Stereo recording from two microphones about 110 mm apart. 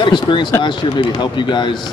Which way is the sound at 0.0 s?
45° left (ahead or behind).